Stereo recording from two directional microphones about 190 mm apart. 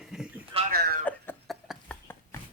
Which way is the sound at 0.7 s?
55° right (ahead or behind).